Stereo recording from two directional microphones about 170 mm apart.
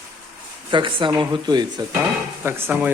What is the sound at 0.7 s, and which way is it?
Speech, 30° right (ahead or behind).